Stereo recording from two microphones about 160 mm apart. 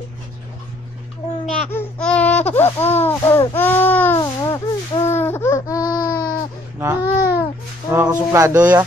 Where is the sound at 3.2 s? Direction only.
20° left (ahead or behind).